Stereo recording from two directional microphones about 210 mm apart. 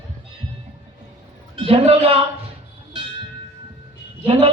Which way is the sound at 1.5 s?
25° right (ahead or behind).